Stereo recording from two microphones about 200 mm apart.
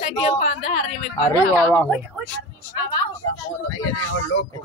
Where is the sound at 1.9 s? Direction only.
5° right (ahead or behind).